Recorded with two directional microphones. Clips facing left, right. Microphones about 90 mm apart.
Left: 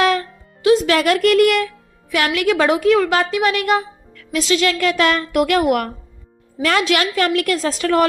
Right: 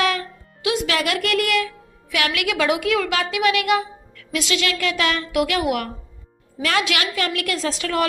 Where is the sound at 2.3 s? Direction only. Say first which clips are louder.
Left 6 dB; 35° left (ahead or behind).